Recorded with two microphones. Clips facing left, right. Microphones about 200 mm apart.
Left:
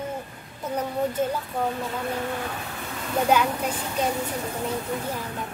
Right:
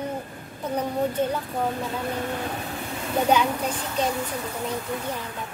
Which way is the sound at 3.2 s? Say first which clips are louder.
Even; 10° left (ahead or behind).